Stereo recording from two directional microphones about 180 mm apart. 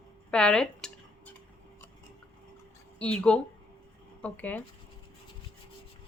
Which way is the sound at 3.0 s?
5° left (ahead or behind).